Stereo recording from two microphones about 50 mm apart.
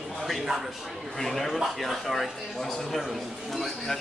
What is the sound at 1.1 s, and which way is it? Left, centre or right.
A man's voice, centre.